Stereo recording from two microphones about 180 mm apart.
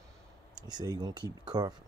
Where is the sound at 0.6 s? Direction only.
25° right (ahead or behind).